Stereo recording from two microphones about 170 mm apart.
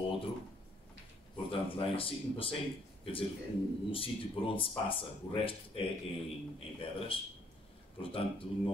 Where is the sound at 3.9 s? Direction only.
30° left (ahead or behind).